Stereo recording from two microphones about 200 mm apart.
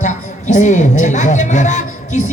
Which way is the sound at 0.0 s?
35° left (ahead or behind).